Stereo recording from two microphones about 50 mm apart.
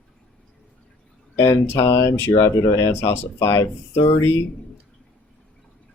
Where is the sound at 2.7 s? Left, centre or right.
Left.